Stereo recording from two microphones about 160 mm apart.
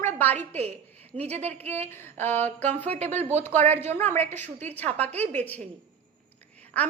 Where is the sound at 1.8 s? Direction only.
15° left (ahead or behind).